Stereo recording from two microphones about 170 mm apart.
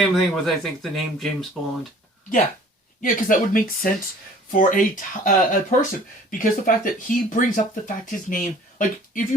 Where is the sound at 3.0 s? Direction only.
55° left (ahead or behind).